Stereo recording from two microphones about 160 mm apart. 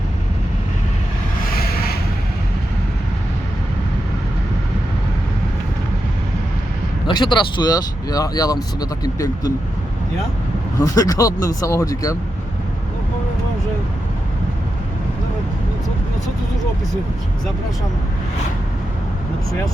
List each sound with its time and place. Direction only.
1.5 s a sound: 70° left (ahead or behind)
7.1 s speech: 30° left (ahead or behind)
10.8 s speech: 20° left (ahead or behind)